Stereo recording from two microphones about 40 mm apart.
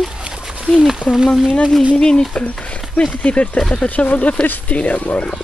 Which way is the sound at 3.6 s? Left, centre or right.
Centre.